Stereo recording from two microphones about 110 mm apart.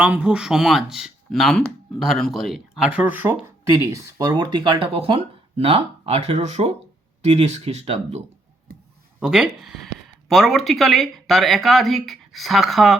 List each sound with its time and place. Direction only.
0.0 s speech: 10° right (ahead or behind)
3.8 s speech: 30° right (ahead or behind); by 8.2 s 80° right
9.2 s speech: 5° right (ahead or behind)